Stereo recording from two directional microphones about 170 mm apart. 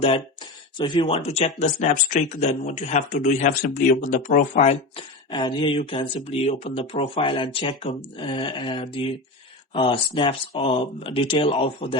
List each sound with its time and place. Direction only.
0.8 s speech: 30° left (ahead or behind)